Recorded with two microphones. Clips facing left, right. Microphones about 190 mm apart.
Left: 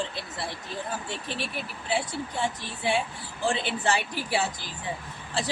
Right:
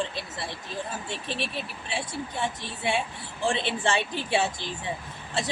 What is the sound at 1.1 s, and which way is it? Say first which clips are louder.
A woman's voice: right 1 dB; 25° right (ahead or behind).